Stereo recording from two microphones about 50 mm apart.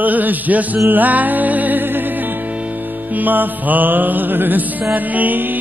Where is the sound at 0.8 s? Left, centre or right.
Right.